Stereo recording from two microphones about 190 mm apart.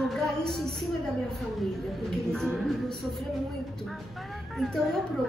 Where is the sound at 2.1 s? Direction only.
Centre (ahead or behind).